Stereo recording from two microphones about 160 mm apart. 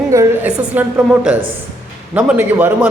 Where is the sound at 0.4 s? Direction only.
10° right (ahead or behind).